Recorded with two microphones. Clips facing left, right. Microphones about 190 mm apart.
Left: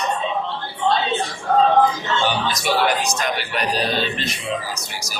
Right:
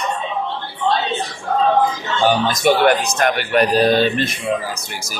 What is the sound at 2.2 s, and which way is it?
Speech, 45° right (ahead or behind).